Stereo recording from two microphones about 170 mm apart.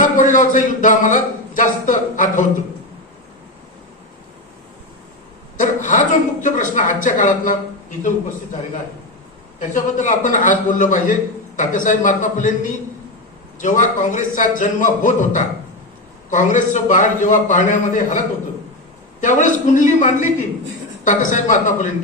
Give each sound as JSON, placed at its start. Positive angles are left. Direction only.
{"t": 0.2, "sound": "a man's voice", "side_deg": 50}
{"t": 5.5, "sound": "a man's voice", "side_deg": 50}
{"t": 9.6, "sound": "a man's voice", "side_deg": 50}
{"t": 19.2, "sound": "a man's voice", "side_deg": 50}